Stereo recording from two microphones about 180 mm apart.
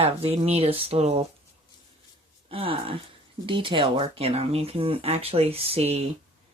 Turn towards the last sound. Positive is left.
turn(degrees=-35)  # may be behind; listen again after turning